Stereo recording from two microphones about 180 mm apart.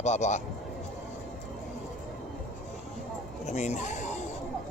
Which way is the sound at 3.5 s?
40° left (ahead or behind).